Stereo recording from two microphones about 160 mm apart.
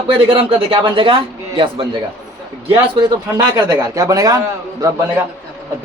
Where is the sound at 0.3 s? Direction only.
35° right (ahead or behind).